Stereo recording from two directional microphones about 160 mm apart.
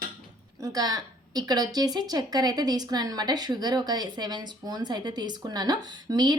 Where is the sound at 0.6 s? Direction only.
25° right (ahead or behind).